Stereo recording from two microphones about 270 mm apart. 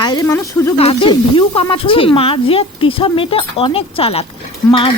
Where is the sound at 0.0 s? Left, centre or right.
Centre.